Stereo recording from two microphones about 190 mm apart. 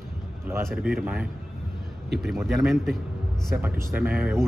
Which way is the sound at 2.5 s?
Centre (ahead or behind).